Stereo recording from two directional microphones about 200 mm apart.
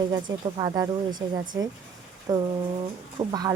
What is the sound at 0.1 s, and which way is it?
Speech, 20° right (ahead or behind).